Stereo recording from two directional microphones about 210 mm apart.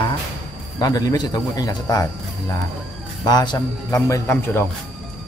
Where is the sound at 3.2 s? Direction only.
20° left (ahead or behind).